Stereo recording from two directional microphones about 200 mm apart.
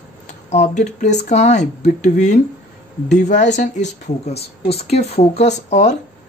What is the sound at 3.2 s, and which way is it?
Speech, 40° left (ahead or behind).